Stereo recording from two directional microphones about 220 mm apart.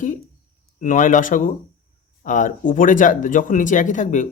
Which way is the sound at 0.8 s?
35° left (ahead or behind).